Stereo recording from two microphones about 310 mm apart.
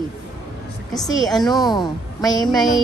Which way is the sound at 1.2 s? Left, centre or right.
Centre.